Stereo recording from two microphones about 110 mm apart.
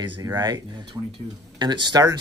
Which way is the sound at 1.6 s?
45° right (ahead or behind).